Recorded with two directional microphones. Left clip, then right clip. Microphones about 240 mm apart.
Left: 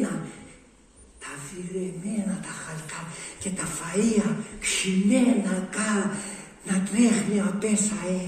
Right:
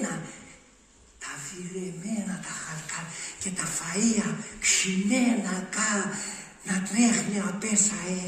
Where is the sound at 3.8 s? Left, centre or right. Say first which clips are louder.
Left 4 dB; right.